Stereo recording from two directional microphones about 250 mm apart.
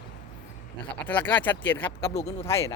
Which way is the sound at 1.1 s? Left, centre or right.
Centre.